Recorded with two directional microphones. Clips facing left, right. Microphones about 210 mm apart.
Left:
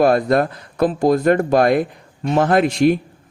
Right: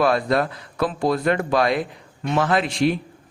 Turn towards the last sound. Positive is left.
turn(degrees=45)  # may be behind; listen again after turning